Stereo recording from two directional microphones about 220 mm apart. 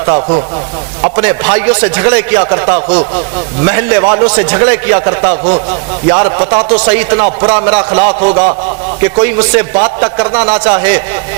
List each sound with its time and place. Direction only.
0.0 s a man's voice: 25° right (ahead or behind)
6.7 s a man's voice: 10° right (ahead or behind)
8.2 s a sound: 40° right (ahead or behind)
9.2 s a man's voice: 10° right (ahead or behind)
10.5 s a man's voice: 10° right (ahead or behind)